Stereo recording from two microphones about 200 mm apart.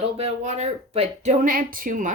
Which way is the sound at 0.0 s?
30° right (ahead or behind).